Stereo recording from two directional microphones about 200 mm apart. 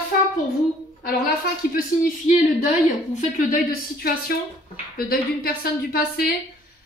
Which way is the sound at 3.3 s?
45° left (ahead or behind).